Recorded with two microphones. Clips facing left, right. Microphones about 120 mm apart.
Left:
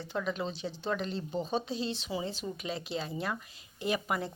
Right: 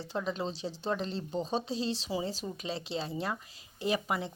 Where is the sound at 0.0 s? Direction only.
30° right (ahead or behind).